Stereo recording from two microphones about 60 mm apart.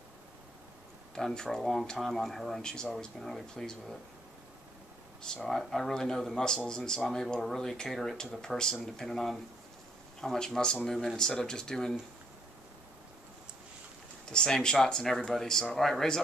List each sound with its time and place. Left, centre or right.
1.1 s speech: centre
5.4 s speech: centre
14.3 s speech: centre